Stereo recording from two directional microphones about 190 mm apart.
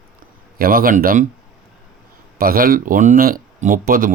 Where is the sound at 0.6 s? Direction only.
50° right (ahead or behind).